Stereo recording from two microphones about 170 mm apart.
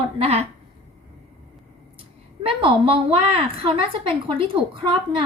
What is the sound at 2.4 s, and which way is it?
A woman's voice, 30° right (ahead or behind).